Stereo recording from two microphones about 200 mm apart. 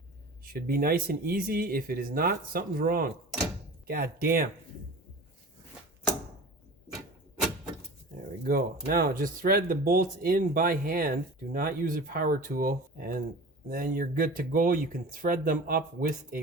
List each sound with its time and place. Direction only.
0.4 s speech: 45° right (ahead or behind)
8.4 s speech: 45° right (ahead or behind)